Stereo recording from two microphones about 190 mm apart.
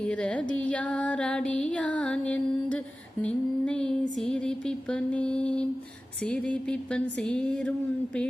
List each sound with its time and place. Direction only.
0.0 s music: 5° left (ahead or behind)